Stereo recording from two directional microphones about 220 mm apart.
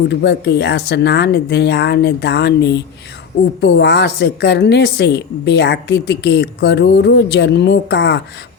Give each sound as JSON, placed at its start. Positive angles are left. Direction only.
{"t": 0.1, "sound": "a woman's voice", "side_deg": 50}